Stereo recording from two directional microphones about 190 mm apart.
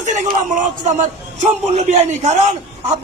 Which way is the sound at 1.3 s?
40° right (ahead or behind).